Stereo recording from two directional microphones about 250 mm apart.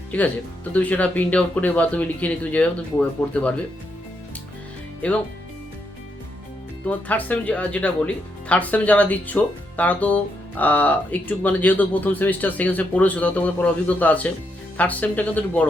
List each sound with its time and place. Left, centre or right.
0.1 s speech: centre
6.8 s speech: centre